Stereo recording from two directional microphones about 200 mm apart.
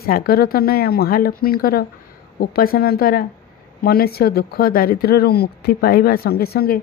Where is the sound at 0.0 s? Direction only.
50° left (ahead or behind).